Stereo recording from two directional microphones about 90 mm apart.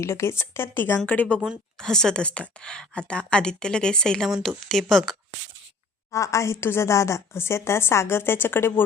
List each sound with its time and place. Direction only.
0.0 s a woman's voice: 30° left (ahead or behind)
1.8 s a woman's voice: 5° left (ahead or behind)
6.1 s a woman's voice: 35° left (ahead or behind)